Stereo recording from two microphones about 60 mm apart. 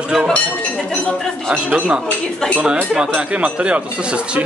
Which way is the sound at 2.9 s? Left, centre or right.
Centre.